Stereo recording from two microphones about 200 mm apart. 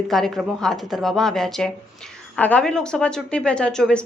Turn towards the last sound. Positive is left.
turn(degrees=5)  # may be behind; listen again after turning